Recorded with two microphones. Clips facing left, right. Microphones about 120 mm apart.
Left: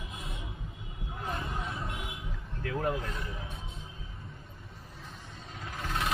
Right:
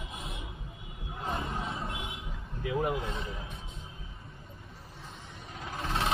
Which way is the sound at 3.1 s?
25° right (ahead or behind).